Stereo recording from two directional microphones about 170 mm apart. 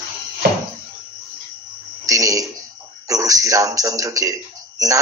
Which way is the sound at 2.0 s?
20° right (ahead or behind).